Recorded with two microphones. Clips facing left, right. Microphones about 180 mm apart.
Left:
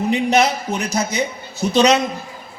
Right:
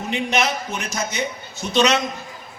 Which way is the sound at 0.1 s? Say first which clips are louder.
Left 4 dB; 35° left (ahead or behind).